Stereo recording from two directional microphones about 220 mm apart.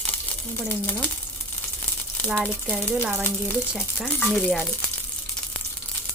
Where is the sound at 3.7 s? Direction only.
Centre (ahead or behind).